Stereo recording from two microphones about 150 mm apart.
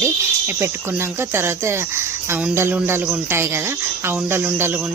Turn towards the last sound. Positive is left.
turn(degrees=-15)  # may be behind; listen again after turning